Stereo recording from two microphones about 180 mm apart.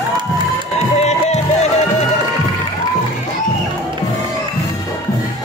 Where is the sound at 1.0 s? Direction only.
40° left (ahead or behind).